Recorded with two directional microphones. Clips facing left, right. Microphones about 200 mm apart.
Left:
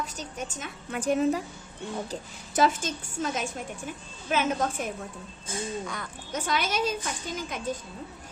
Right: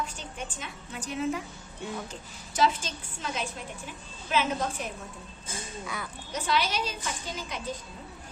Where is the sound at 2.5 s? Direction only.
50° left (ahead or behind).